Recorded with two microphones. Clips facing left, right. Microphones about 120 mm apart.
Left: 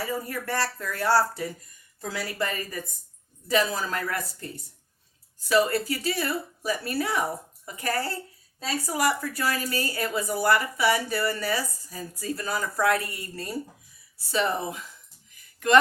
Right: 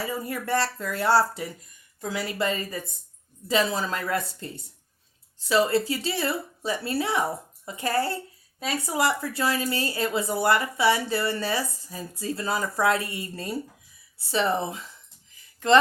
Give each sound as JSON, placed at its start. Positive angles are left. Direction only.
{"t": 0.0, "sound": "a woman's voice", "side_deg": -20}